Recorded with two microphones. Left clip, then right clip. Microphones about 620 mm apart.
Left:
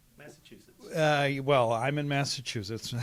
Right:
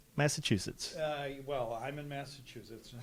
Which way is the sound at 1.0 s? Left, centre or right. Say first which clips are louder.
Left 12 dB; left.